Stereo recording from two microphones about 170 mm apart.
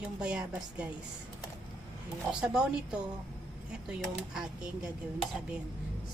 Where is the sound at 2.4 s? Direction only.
5° right (ahead or behind).